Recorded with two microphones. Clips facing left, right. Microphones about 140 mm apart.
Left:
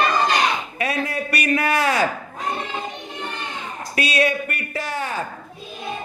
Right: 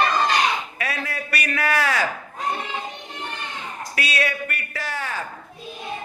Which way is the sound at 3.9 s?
20° left (ahead or behind).